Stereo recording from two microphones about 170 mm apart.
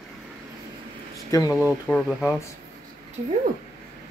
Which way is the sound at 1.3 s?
20° left (ahead or behind).